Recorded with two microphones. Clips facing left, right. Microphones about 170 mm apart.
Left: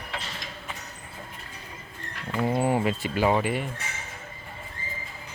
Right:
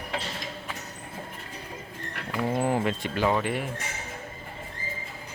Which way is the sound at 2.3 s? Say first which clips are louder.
Left 2 dB; centre (ahead or behind).